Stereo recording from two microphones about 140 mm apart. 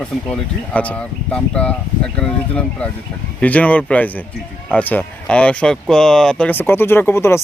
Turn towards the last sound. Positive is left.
turn(degrees=20)  # may be behind; listen again after turning